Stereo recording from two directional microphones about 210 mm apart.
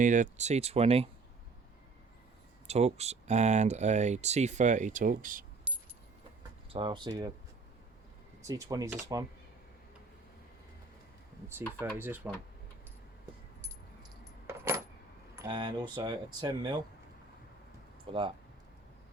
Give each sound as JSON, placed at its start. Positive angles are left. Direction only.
{"t": 0.0, "sound": "speech", "side_deg": -35}
{"t": 2.6, "sound": "speech", "side_deg": -30}
{"t": 5.7, "sound": "keys jangling", "side_deg": -25}
{"t": 6.7, "sound": "speech", "side_deg": -25}
{"t": 8.4, "sound": "speech", "side_deg": -15}
{"t": 11.4, "sound": "speech", "side_deg": -10}
{"t": 14.4, "sound": "coin", "side_deg": -10}
{"t": 15.4, "sound": "speech", "side_deg": -20}
{"t": 18.1, "sound": "speech", "side_deg": -25}